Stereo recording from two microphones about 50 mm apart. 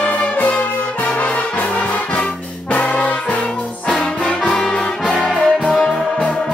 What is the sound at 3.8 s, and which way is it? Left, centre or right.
Music, centre.